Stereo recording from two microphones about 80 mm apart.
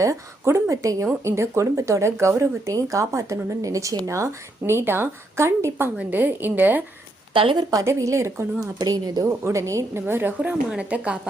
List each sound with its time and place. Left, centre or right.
0.0 s speech: right
5.7 s a woman's voice: right
7.3 s a woman's voice: right
8.8 s speech: right
9.2 s speech: right; by 11.2 s centre